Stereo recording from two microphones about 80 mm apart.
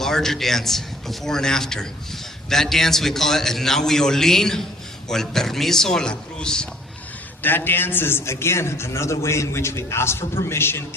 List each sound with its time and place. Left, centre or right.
0.0 s a man's voice: centre
7.4 s a man's voice: left